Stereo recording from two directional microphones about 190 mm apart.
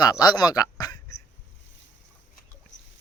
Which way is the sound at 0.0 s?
20° left (ahead or behind).